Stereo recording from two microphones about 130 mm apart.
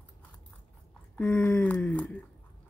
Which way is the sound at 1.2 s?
15° left (ahead or behind).